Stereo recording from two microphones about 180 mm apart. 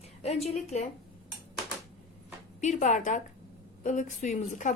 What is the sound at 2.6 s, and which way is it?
A woman's voice, 45° left (ahead or behind).